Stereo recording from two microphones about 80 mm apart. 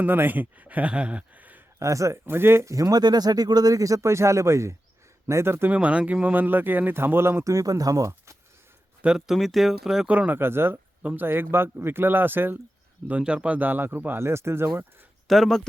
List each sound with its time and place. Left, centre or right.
0.0 s speech: right
1.8 s speech: right
2.2 s speech: right
5.7 s speech: centre; by 8.4 s right
9.0 s speech: centre
10.1 s speech: centre
10.3 s speech: right
15.3 s speech: centre